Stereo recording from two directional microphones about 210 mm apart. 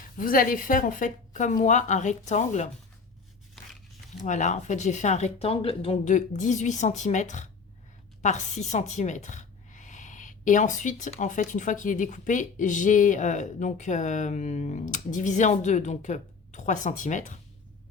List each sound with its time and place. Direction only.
0.2 s a woman's voice: 40° left (ahead or behind)
4.2 s a woman's voice: 35° left (ahead or behind)